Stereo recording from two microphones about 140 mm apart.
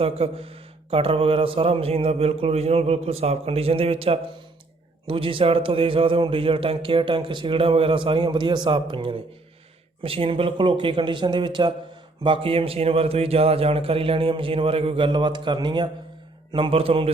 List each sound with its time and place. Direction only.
0.0 s a man's voice: 45° right (ahead or behind)